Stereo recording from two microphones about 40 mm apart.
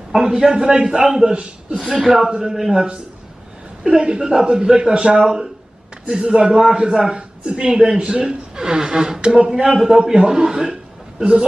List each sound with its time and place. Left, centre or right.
0.1 s a man's voice: centre
1.3 s speech: right
2.0 s a man's voice: centre
3.8 s speech: right